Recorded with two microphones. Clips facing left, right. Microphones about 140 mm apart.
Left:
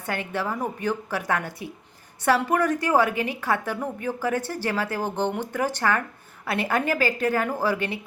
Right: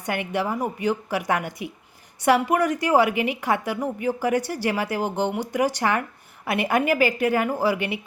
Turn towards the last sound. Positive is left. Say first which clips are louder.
# right 2 dB
turn(degrees=-15)  # may be behind; listen again after turning